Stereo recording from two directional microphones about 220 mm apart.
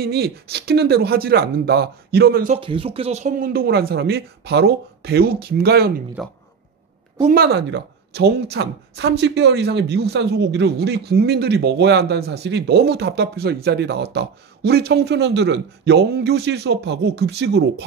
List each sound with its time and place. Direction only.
0.0 s speech: 45° right (ahead or behind)
2.5 s speech: 25° right (ahead or behind); by 5.9 s 45° right (ahead or behind)
6.2 s speech: centre (ahead or behind)
7.3 s speech: 50° right (ahead or behind)